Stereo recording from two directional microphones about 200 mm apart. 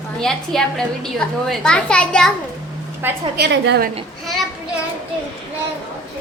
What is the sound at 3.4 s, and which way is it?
Speech, 55° right (ahead or behind).